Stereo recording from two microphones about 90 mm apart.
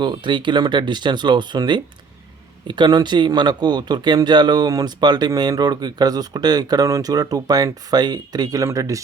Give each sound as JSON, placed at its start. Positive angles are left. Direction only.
{"t": 0.0, "sound": "speech", "side_deg": -60}